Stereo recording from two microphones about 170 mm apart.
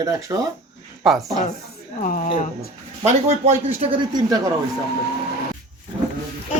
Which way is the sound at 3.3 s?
35° right (ahead or behind).